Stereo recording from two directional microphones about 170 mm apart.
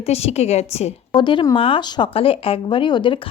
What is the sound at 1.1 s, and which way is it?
Speech, 25° left (ahead or behind).